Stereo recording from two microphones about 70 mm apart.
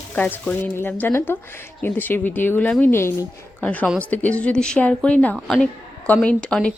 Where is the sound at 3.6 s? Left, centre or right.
Left.